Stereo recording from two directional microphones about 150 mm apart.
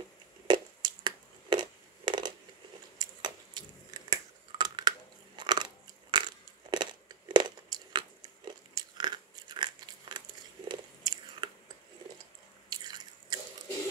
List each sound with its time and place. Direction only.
0.5 s crushing: 30° right (ahead or behind)
3.0 s a sound: 30° right (ahead or behind)
4.1 s crushing: 25° right (ahead or behind)
6.1 s a sound: 30° right (ahead or behind)
10.7 s biting: 30° right (ahead or behind)
12.6 s biting: 30° right (ahead or behind)